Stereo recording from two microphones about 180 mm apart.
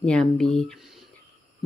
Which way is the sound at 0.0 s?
5° left (ahead or behind).